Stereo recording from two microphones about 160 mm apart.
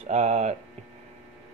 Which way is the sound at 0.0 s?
40° right (ahead or behind).